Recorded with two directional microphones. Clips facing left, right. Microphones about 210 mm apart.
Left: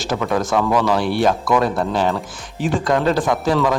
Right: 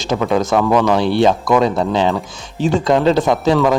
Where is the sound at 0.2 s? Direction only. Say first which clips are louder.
Right 4 dB; 15° right (ahead or behind).